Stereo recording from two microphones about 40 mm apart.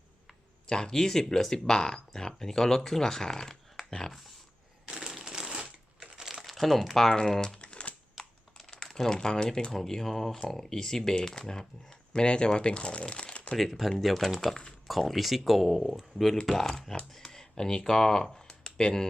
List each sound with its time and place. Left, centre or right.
0.7 s speech: centre
4.9 s crushing: centre
6.1 s crumpling: centre
6.4 s speech: centre
7.1 s speech: centre
7.4 s typing: centre
8.2 s computer keyboard: centre
9.0 s speech: centre
9.7 s speech: centre; by 13.6 s left
13.6 s speech: centre
14.4 s speech: centre
14.8 s speech: centre
18.3 s a sound: centre